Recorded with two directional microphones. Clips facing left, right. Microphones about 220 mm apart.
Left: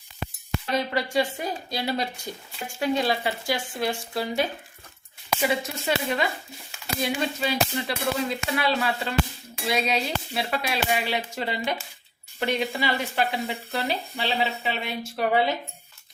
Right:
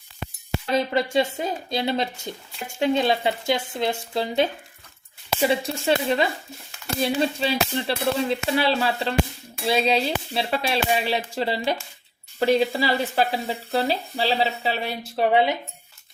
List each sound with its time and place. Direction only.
0.7 s speech: 25° right (ahead or behind)